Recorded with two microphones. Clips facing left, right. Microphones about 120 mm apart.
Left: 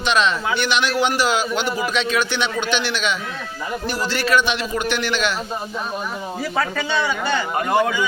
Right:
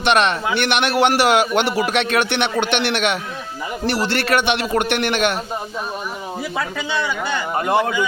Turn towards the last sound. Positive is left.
turn(degrees=-20)  # may be behind; listen again after turning